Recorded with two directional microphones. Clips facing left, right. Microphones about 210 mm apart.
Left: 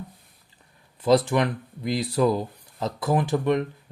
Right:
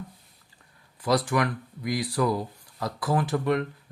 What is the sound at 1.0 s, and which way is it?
Speech, 25° left (ahead or behind).